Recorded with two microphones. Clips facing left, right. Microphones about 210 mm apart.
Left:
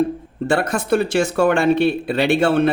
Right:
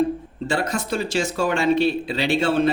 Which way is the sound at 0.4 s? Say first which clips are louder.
Left 5 dB; 60° left (ahead or behind).